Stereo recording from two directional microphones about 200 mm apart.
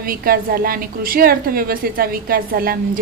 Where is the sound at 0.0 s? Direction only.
45° right (ahead or behind).